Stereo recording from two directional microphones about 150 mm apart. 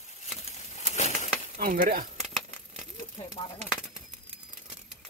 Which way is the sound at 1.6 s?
80° right.